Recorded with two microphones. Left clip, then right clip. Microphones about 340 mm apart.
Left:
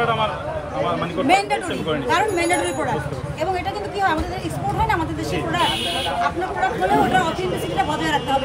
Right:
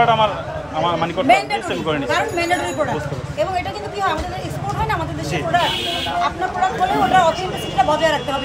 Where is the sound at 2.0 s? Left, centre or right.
Centre.